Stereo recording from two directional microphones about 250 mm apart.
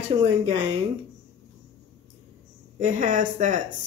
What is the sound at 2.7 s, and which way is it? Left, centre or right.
Speech, right.